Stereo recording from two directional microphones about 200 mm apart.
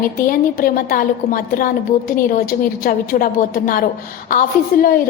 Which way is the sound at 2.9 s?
45° left (ahead or behind).